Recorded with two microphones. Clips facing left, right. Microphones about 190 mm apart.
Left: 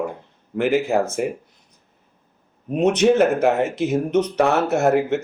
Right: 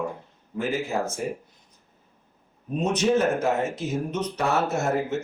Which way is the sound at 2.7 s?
75° left (ahead or behind).